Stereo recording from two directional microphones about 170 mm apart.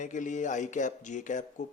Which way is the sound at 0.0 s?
45° left (ahead or behind).